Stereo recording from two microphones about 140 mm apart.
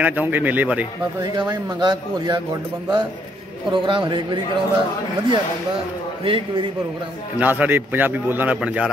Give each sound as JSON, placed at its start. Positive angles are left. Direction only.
{"t": 0.0, "sound": "a man's voice", "side_deg": -10}
{"t": 1.2, "sound": "a man's voice", "side_deg": -30}
{"t": 6.2, "sound": "a man's voice", "side_deg": -40}
{"t": 7.3, "sound": "a man's voice", "side_deg": -10}